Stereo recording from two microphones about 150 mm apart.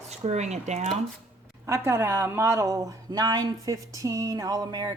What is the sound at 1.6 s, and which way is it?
Speech, 15° right (ahead or behind).